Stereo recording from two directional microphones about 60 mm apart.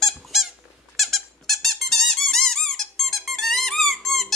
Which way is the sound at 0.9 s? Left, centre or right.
Centre.